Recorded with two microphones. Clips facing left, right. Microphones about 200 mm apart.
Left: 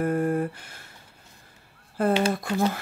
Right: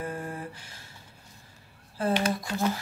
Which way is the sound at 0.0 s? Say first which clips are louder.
Left 11 dB; 55° left (ahead or behind).